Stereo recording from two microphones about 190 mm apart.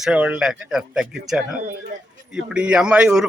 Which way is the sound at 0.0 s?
5° right (ahead or behind).